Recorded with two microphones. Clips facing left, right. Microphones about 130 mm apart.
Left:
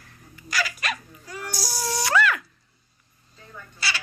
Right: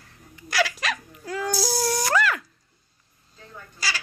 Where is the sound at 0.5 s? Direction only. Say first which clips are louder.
Right 4 dB; 85° right.